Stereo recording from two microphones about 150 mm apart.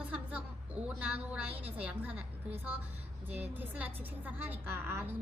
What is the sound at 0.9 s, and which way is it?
A woman's voice, 10° right (ahead or behind).